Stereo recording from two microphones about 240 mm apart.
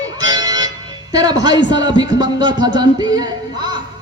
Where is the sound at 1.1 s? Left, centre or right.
Centre.